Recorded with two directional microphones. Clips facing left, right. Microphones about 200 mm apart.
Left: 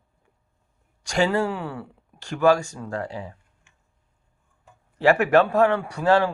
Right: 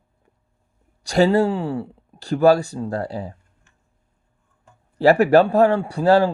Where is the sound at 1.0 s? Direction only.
35° right (ahead or behind).